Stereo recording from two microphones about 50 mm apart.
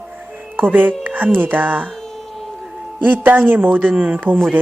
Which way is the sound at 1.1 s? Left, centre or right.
Right.